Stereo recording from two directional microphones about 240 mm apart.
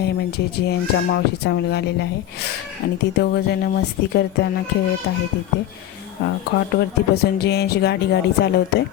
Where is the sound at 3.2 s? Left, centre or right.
Left.